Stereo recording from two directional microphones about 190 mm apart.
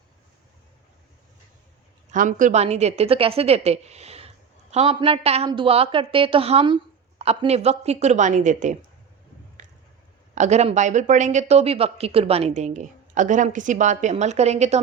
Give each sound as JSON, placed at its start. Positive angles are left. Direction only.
{"t": 2.0, "sound": "speech", "side_deg": -45}
{"t": 10.3, "sound": "speech", "side_deg": -35}